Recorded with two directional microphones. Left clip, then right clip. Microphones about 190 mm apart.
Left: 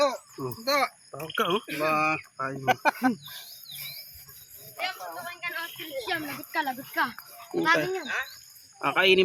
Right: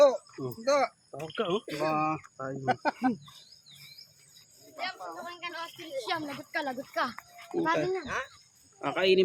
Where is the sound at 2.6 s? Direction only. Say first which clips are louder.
Left 5 dB; 20° right (ahead or behind).